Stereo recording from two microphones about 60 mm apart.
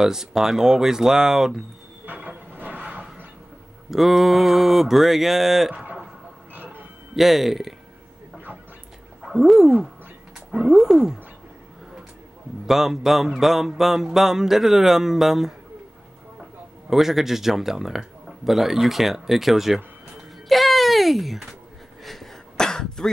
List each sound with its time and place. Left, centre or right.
0.0 s speech: centre
2.5 s a sound: right
2.8 s a sound: centre
3.9 s music: centre
6.5 s music: right
7.2 s music: centre
9.2 s a sound: centre
10.5 s speech: centre
12.6 s music: centre
16.9 s music: centre
20.4 s speech: centre
22.0 s a sound: centre
22.6 s throat clearing: centre